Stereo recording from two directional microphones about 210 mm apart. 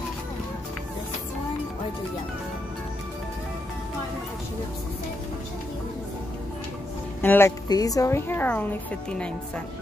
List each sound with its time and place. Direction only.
7.2 s speech: 10° left (ahead or behind)